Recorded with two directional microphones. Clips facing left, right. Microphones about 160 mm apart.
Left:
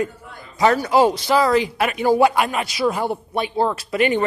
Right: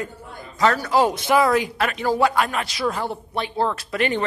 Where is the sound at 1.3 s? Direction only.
5° right (ahead or behind).